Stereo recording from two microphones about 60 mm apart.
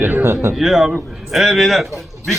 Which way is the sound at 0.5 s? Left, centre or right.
Centre.